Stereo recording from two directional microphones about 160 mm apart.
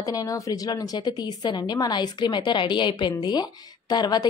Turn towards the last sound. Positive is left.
turn(degrees=25)  # may be behind; listen again after turning